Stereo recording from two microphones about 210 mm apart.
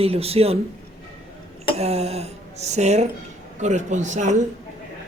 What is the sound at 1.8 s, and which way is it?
Speech, 30° right (ahead or behind).